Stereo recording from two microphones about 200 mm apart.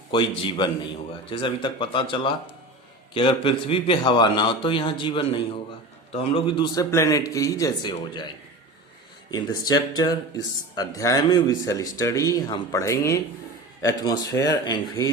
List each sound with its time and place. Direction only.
0.1 s a man's voice: 25° left (ahead or behind)
9.3 s a man's voice: 20° left (ahead or behind)